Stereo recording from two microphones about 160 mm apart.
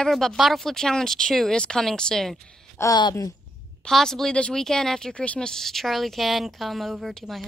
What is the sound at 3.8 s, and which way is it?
A woman's voice, 5° left (ahead or behind).